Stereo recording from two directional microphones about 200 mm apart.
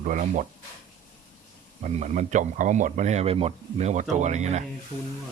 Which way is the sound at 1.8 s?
35° right (ahead or behind).